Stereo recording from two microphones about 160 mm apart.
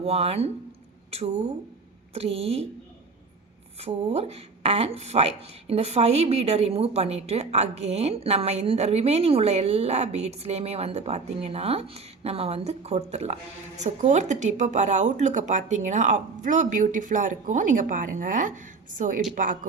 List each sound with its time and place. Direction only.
0.0 s a woman's voice: 40° right (ahead or behind)
3.8 s a woman's voice: 40° right (ahead or behind); by 19.5 s 55° right (ahead or behind)